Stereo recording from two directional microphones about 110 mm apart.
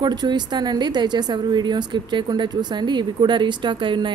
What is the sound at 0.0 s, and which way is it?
A woman's voice, 40° right (ahead or behind).